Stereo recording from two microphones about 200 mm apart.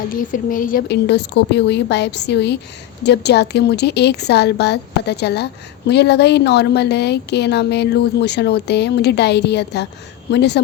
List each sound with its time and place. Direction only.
0.3 s a woman's voice: 45° left (ahead or behind)